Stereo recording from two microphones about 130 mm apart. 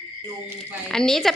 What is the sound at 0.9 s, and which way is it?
Speech, 5° left (ahead or behind).